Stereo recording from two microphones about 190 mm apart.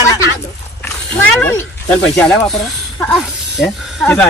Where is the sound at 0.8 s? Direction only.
10° left (ahead or behind).